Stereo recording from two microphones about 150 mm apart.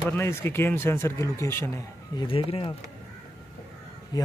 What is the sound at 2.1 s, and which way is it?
Speech, 35° left (ahead or behind).